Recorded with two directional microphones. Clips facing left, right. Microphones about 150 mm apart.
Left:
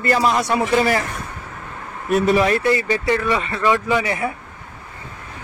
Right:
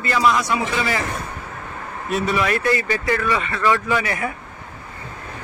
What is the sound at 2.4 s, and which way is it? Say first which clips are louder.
Speech: left 3 dB; 30° left (ahead or behind).